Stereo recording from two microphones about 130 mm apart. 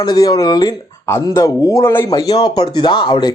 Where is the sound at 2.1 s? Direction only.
30° left (ahead or behind).